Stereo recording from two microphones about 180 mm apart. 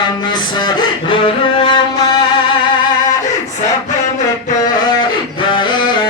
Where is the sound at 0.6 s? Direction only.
25° left (ahead or behind).